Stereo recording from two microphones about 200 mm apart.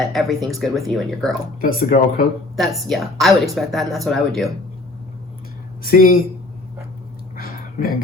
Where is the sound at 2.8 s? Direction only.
Centre (ahead or behind).